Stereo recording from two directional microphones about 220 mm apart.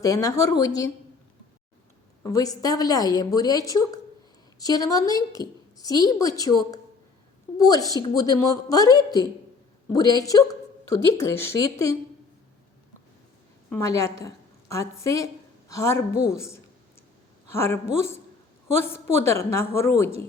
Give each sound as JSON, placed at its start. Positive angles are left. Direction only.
{"t": 0.0, "sound": "a woman's voice", "side_deg": 15}
{"t": 2.2, "sound": "a woman's voice", "side_deg": 15}
{"t": 13.7, "sound": "a woman's voice", "side_deg": 10}
{"t": 17.5, "sound": "a woman's voice", "side_deg": 10}